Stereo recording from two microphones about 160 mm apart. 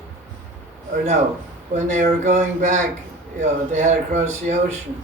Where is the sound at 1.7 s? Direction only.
45° right (ahead or behind).